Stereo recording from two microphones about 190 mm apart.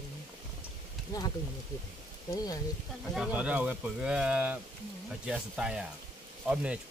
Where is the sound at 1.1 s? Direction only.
20° left (ahead or behind).